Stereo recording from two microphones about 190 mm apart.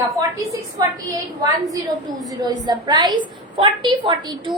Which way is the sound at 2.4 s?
20° right (ahead or behind).